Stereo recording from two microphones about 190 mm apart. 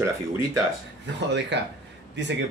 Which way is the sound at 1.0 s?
65° right (ahead or behind).